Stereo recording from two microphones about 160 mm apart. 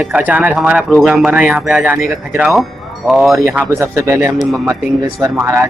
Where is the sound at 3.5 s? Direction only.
15° right (ahead or behind).